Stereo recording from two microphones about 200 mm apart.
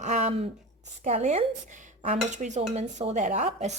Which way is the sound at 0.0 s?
35° right (ahead or behind).